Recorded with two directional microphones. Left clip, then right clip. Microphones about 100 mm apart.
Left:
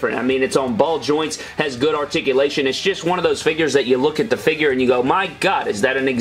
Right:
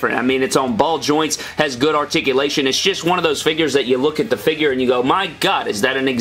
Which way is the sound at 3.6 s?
10° right (ahead or behind).